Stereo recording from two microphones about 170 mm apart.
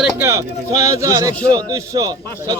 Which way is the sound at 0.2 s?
20° right (ahead or behind).